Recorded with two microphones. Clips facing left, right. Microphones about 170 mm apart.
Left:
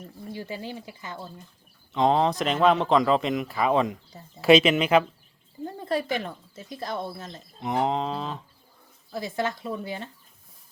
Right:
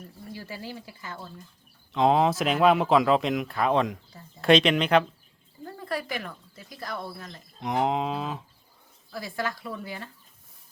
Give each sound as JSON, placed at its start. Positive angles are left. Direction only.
{"t": 0.3, "sound": "speech", "side_deg": 20}
{"t": 1.9, "sound": "speech", "side_deg": -5}
{"t": 5.6, "sound": "speech", "side_deg": 20}
{"t": 7.6, "sound": "speech", "side_deg": 0}
{"t": 9.1, "sound": "speech", "side_deg": 20}